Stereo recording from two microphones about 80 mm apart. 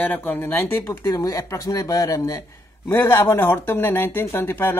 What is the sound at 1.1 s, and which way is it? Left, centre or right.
Speech, left.